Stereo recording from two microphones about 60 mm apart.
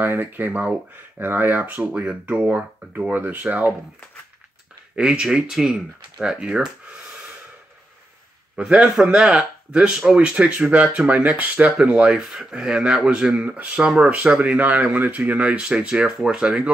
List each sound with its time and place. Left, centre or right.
0.0 s speech: right
4.9 s speech: centre
8.5 s speech: right
8.8 s speech: centre